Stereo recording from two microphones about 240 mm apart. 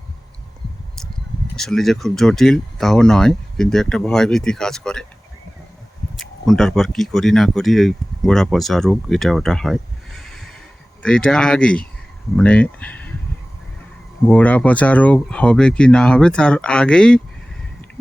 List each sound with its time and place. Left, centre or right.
1.5 s speech: centre
6.1 s speech: centre
14.3 s speech: centre